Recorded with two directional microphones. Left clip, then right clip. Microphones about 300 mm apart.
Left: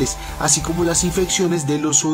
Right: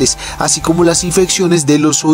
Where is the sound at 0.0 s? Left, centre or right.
Right.